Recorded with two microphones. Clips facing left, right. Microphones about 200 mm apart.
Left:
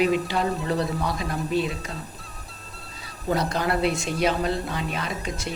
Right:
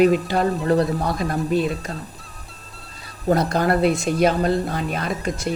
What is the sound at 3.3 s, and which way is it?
Speech, 50° right (ahead or behind).